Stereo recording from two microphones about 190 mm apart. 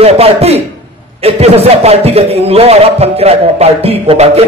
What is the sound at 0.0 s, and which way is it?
A man's voice, 30° right (ahead or behind).